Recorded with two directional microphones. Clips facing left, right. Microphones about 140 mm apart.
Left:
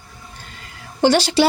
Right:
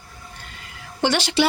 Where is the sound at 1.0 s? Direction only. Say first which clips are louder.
Left 5 dB; 35° left (ahead or behind).